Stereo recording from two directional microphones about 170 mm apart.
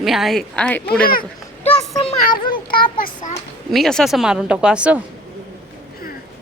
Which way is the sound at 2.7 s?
55° left (ahead or behind).